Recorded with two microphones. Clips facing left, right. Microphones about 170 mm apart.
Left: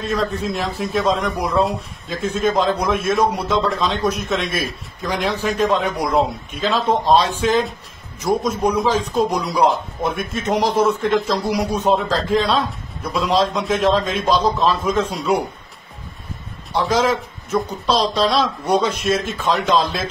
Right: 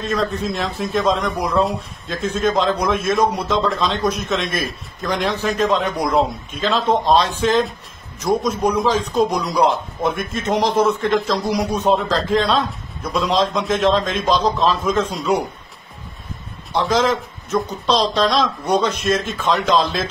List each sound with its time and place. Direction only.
0.0 s a man's voice: 5° left (ahead or behind)
16.7 s a man's voice: 10° left (ahead or behind)